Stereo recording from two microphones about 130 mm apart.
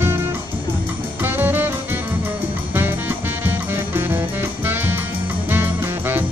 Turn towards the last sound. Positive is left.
turn(degrees=-15)  # may be behind; listen again after turning